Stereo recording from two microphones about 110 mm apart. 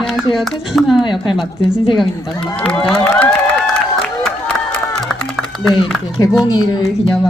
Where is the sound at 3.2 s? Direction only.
5° left (ahead or behind).